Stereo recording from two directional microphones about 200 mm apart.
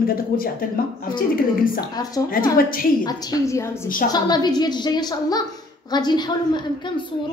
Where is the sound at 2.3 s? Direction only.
45° left (ahead or behind).